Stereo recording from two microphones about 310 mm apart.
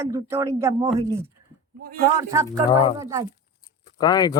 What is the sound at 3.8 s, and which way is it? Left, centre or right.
Speech, centre.